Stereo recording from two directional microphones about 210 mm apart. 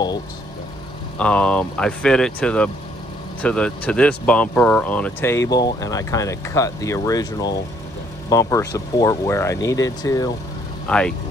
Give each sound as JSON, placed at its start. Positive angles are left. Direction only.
{"t": 1.1, "sound": "speech", "side_deg": 5}
{"t": 10.9, "sound": "speech", "side_deg": 5}